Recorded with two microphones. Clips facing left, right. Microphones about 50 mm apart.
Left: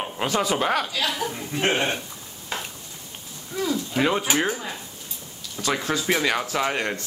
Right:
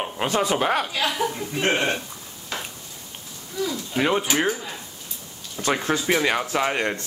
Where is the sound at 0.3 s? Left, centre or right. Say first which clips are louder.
Right 1 dB; right.